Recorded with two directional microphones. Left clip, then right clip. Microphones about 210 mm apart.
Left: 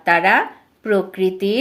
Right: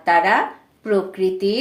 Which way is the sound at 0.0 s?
40° left (ahead or behind).